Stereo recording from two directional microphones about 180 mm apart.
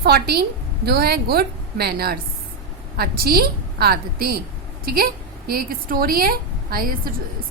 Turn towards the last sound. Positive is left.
turn(degrees=-55)  # may be behind; listen again after turning